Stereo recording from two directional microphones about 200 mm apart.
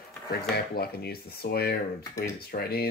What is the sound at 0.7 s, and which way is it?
Speech, 50° left (ahead or behind).